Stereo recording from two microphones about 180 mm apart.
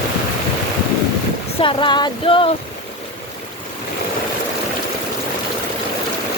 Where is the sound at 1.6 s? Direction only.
30° left (ahead or behind).